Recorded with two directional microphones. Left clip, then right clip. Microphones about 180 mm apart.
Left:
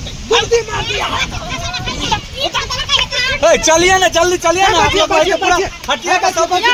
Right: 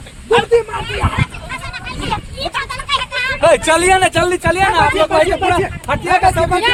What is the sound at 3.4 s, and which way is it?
Speech, 40° right (ahead or behind).